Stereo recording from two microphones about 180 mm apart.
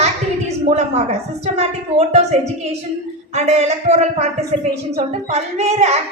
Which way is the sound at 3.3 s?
40° right (ahead or behind).